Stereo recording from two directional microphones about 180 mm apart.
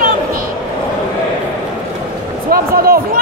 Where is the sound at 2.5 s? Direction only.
55° right (ahead or behind).